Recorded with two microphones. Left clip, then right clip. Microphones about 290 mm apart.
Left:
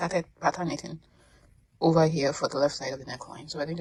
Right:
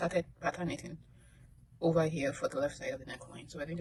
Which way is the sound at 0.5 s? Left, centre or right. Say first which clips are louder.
Left 7 dB; centre.